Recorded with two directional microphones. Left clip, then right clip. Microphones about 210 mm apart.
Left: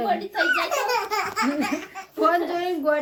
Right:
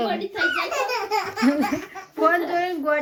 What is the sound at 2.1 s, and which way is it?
Speech, 15° left (ahead or behind).